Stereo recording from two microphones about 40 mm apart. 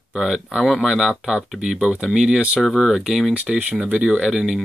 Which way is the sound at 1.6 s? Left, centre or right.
Centre.